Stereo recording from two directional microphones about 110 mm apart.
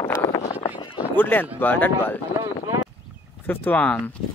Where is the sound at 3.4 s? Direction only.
15° left (ahead or behind).